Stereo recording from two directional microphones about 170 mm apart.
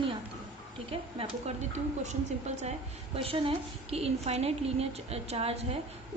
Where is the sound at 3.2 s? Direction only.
30° right (ahead or behind).